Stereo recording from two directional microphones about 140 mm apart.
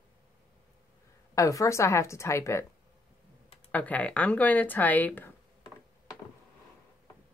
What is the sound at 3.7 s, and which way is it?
Speech, 10° left (ahead or behind).